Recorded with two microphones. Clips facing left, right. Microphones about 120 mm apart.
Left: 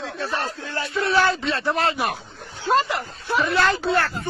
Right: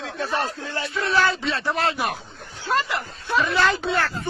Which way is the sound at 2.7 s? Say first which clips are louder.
Left 3 dB; 20° left (ahead or behind).